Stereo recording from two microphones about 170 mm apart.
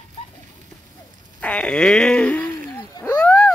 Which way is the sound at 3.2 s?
5° left (ahead or behind).